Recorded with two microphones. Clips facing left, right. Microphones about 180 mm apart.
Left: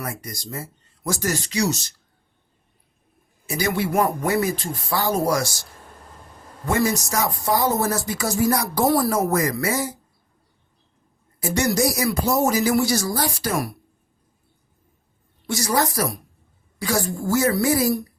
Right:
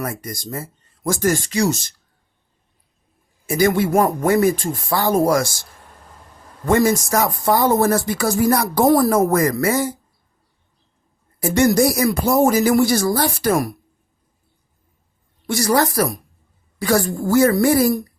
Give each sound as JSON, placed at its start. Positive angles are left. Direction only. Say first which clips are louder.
{"t": 0.0, "sound": "speech", "louder": "right 5 dB", "side_deg": -50}
{"t": 3.4, "sound": "speech", "louder": "right 7 dB", "side_deg": -50}
{"t": 6.7, "sound": "speech", "louder": "right 6 dB", "side_deg": -50}
{"t": 11.3, "sound": "speech", "louder": "right 6 dB", "side_deg": -55}
{"t": 15.4, "sound": "speech", "louder": "right 5 dB", "side_deg": -60}